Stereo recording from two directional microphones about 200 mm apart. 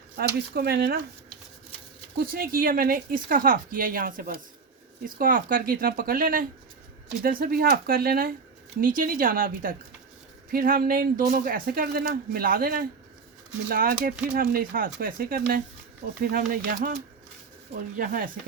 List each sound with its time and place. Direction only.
0.2 s speech: 50° right (ahead or behind)
2.1 s speech: 50° right (ahead or behind)